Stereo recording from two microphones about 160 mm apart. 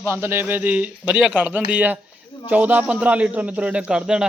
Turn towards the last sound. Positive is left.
turn(degrees=-5)  # may be behind; listen again after turning